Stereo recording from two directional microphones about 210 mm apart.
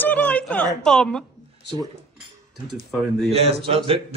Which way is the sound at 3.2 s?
30° right (ahead or behind).